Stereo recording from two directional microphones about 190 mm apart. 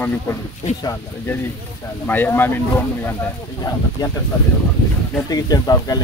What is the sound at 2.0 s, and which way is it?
Speech, 10° left (ahead or behind).